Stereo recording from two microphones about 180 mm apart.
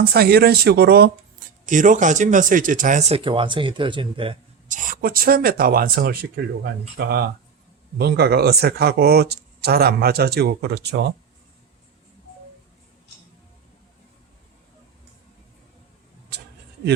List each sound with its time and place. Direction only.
0.0 s speech: 60° right (ahead or behind)
1.6 s speech: 45° right (ahead or behind); by 4.4 s 30° right (ahead or behind)
4.7 s speech: 50° right (ahead or behind); by 11.0 s 65° right (ahead or behind)